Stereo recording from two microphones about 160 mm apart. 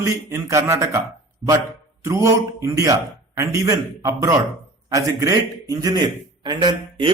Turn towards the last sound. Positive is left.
turn(degrees=-30)  # may be behind; listen again after turning